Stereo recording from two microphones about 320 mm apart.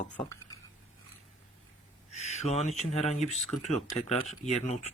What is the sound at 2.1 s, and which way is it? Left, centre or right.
Speech, left.